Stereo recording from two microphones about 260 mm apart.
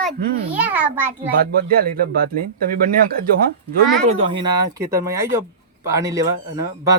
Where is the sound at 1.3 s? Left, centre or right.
Right.